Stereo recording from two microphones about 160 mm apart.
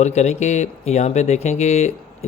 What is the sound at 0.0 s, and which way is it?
Speech, 45° left (ahead or behind).